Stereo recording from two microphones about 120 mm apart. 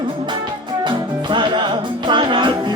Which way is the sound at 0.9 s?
40° right (ahead or behind).